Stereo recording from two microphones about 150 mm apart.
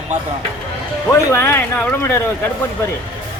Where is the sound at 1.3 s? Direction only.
15° left (ahead or behind).